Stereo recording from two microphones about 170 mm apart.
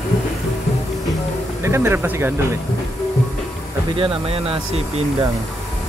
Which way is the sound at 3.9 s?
30° right (ahead or behind).